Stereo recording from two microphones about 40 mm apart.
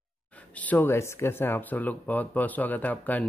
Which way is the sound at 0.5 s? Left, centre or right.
Left.